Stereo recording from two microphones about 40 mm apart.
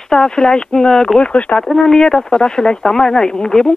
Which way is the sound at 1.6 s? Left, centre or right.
Centre.